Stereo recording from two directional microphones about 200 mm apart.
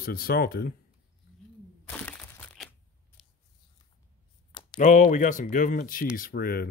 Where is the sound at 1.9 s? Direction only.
5° left (ahead or behind).